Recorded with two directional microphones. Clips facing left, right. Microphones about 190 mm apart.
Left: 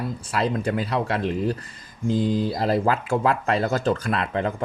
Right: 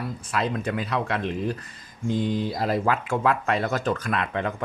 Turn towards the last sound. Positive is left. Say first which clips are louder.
# left 2 dB
turn(degrees=35)  # may be behind; listen again after turning